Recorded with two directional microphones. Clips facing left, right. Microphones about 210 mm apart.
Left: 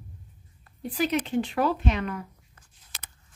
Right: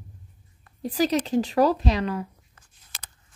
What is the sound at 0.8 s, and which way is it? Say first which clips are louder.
A woman's voice: right 3 dB; 35° right (ahead or behind).